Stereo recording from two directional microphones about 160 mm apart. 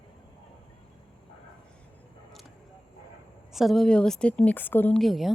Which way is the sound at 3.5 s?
Centre (ahead or behind).